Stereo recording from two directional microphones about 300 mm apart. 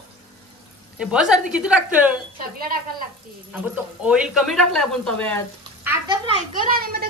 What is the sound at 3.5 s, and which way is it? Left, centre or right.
Speech, centre.